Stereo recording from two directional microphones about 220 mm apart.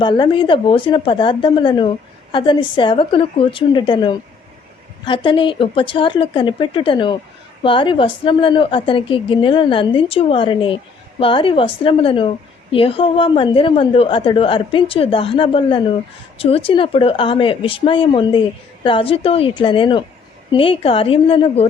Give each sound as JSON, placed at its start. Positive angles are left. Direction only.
{"t": 0.0, "sound": "speech", "side_deg": 20}